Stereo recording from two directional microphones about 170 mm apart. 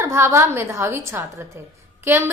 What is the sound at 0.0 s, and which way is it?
A woman's voice, 15° right (ahead or behind).